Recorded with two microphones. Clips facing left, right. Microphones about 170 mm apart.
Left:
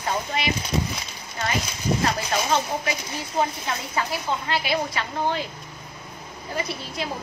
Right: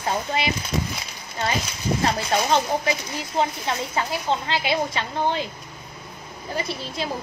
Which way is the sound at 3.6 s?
25° right (ahead or behind).